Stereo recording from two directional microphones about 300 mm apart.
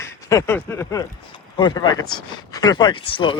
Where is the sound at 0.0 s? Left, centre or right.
Centre.